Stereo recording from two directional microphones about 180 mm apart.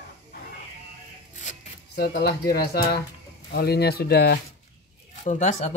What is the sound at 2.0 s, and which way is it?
Speech, 60° left (ahead or behind).